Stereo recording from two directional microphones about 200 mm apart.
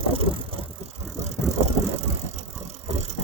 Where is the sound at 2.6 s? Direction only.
35° right (ahead or behind).